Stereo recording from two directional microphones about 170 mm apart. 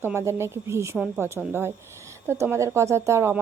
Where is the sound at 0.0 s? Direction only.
15° right (ahead or behind).